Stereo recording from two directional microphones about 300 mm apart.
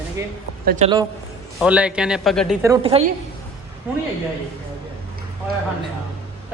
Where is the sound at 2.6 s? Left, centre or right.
Centre.